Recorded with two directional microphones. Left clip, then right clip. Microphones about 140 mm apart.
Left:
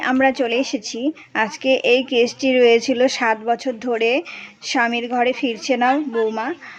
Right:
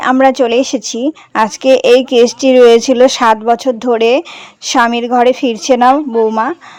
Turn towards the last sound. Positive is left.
turn(degrees=-40)  # may be behind; listen again after turning